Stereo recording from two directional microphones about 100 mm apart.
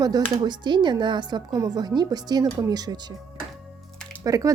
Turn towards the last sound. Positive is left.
turn(degrees=-35)  # may be behind; listen again after turning